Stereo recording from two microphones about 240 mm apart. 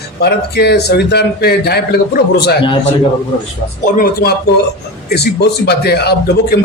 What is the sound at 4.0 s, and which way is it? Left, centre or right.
A man's voice, left.